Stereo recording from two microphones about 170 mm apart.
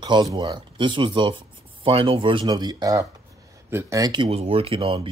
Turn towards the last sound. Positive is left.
turn(degrees=-35)  # may be behind; listen again after turning